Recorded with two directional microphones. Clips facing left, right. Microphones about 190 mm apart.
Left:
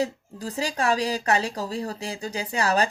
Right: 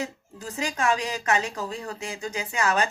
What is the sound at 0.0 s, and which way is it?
Speech, 35° left (ahead or behind).